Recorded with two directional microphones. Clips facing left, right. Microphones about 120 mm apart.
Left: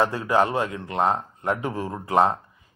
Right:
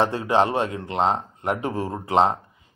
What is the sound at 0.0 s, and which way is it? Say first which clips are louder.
Speech: right 1 dB; 25° right (ahead or behind).